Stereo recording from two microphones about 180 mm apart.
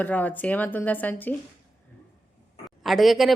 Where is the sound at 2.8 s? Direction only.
Centre (ahead or behind).